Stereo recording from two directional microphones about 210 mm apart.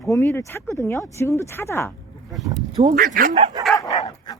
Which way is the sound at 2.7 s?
35° right (ahead or behind).